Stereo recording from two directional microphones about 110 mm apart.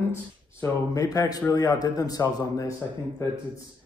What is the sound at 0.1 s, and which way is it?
Speech, 25° left (ahead or behind).